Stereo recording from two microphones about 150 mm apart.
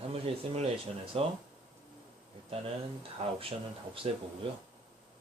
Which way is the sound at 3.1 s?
40° right (ahead or behind).